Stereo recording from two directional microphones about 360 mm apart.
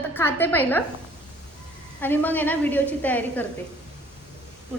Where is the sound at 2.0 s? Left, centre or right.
Centre.